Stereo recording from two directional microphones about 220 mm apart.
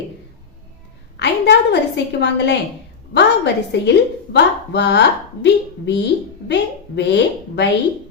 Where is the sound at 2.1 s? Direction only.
50° left (ahead or behind).